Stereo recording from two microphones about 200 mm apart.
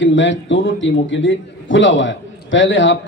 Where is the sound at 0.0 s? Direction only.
70° left (ahead or behind).